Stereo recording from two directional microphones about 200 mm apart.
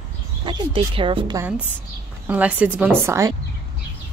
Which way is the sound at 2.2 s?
5° right (ahead or behind).